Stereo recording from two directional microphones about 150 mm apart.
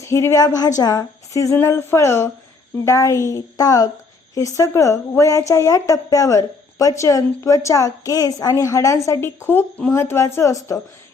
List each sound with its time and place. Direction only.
0.0 s a woman's voice: 20° left (ahead or behind)